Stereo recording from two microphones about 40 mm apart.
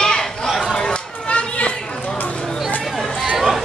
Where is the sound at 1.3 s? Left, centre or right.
Left.